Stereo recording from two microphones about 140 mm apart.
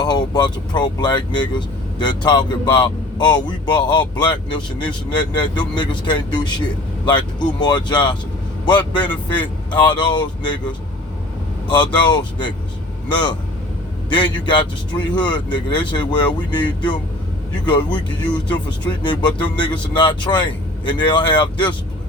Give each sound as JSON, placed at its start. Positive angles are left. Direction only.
{"t": 0.0, "sound": "speech", "side_deg": 30}
{"t": 11.7, "sound": "speech", "side_deg": 35}